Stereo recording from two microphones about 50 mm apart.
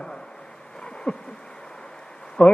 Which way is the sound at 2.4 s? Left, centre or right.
Centre.